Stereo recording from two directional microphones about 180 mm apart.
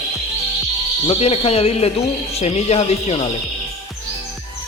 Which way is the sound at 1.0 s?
30° left (ahead or behind).